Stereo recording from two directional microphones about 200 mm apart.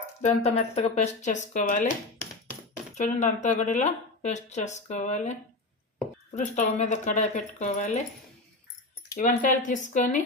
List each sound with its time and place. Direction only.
0.2 s speech: 35° left (ahead or behind)
2.9 s speech: 35° left (ahead or behind)
6.3 s speech: 35° left (ahead or behind)
9.1 s speech: 40° left (ahead or behind)